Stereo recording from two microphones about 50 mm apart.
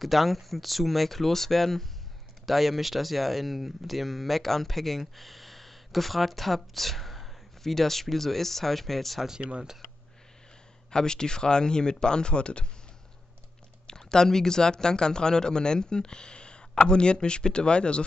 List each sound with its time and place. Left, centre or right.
0.0 s speech: centre
9.4 s speech: right
10.9 s speech: centre
13.8 s speech: centre